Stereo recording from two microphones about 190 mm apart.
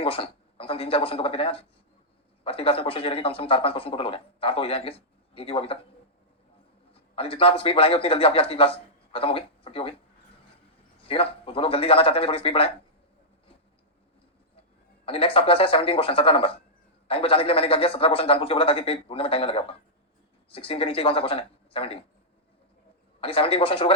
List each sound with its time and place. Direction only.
0.0 s speech: 30° left (ahead or behind)
7.2 s speech: 30° left (ahead or behind)
11.1 s speech: 30° left (ahead or behind)
15.0 s speech: 30° left (ahead or behind)
23.2 s speech: 30° left (ahead or behind)